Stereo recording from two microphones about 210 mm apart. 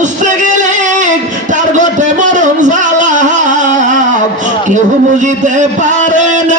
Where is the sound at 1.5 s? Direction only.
35° right (ahead or behind).